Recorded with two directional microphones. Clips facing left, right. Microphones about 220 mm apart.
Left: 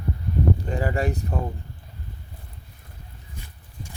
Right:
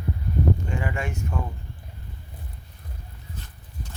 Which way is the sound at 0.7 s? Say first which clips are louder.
Left 5 dB; 35° left (ahead or behind).